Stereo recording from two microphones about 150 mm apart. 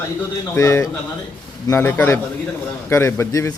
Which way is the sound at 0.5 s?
20° left (ahead or behind).